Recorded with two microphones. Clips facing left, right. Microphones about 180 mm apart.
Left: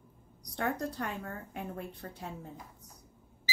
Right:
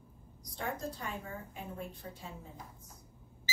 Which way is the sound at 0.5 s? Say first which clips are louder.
Left 5 dB; 65° left (ahead or behind).